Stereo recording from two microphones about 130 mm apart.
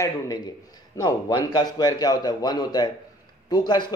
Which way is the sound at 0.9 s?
30° left (ahead or behind).